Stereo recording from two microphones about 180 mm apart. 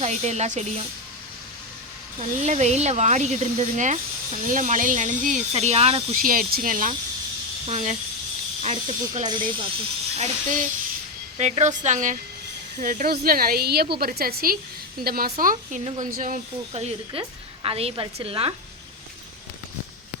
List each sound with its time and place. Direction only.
0.0 s speech: 40° right (ahead or behind)
2.1 s speech: 40° right (ahead or behind)
6.2 s speech: 55° right (ahead or behind)
9.2 s speech: 25° right (ahead or behind)
10.2 s speech: 40° right (ahead or behind)
15.8 s speech: 35° right (ahead or behind)
16.0 s speech: 50° right (ahead or behind)
16.7 s speech: 35° right (ahead or behind)